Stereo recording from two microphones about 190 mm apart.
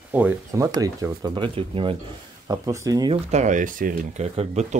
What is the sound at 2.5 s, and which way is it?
Speech, 15° right (ahead or behind).